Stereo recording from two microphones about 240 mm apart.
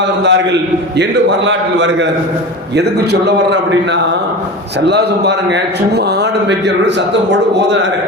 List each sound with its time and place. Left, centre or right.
0.2 s speech: right
1.5 s speech: right